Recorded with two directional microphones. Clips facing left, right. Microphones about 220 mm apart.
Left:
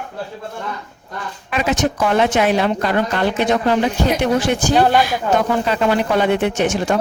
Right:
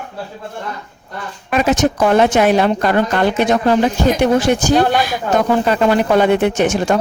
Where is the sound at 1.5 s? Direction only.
45° right (ahead or behind).